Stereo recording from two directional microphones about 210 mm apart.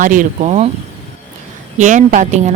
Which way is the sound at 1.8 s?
35° right (ahead or behind).